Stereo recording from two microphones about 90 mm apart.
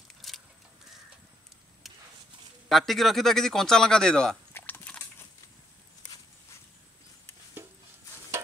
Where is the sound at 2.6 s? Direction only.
Centre (ahead or behind).